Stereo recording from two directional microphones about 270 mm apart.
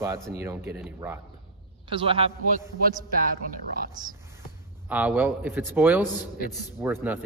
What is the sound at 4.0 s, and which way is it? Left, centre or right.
Speech, centre.